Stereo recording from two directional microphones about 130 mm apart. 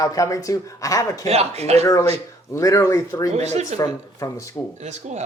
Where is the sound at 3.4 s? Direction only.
60° right (ahead or behind).